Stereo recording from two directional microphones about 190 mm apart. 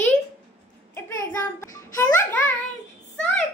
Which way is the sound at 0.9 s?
15° left (ahead or behind).